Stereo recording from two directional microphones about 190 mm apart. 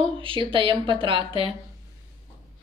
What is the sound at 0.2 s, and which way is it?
Speech, 25° right (ahead or behind).